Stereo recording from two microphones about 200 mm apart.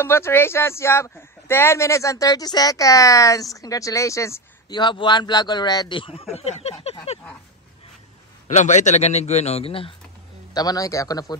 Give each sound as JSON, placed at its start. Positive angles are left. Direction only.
{"t": 0.0, "sound": "speech", "side_deg": 10}
{"t": 8.5, "sound": "a man's voice", "side_deg": 35}